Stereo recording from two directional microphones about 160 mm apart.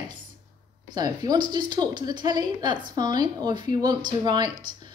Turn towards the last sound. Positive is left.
turn(degrees=-25)  # may be behind; listen again after turning